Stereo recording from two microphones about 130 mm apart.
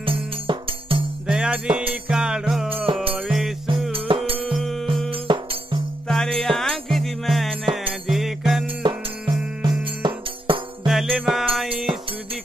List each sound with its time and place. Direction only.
0.0 s music: 45° right (ahead or behind)
1.2 s music: 5° right (ahead or behind)
2.7 s music: 45° right (ahead or behind)
3.2 s music: 5° right (ahead or behind)
4.3 s insect: 45° right (ahead or behind)
4.6 s music: centre (ahead or behind)
5.1 s music: 40° right (ahead or behind)
6.0 s music: 5° left (ahead or behind)
8.8 s music: 35° right (ahead or behind)
10.9 s music: 5° right (ahead or behind)